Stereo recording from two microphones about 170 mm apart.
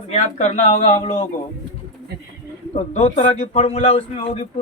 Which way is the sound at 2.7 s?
40° left (ahead or behind).